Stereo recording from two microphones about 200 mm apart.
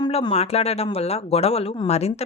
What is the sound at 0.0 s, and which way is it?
Speech, 25° left (ahead or behind).